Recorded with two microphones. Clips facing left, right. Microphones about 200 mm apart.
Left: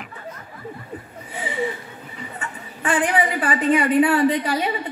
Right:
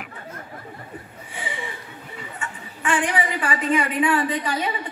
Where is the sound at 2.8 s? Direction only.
35° left (ahead or behind).